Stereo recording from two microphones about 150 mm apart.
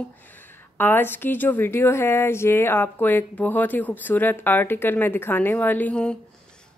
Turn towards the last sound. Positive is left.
turn(degrees=10)  # may be behind; listen again after turning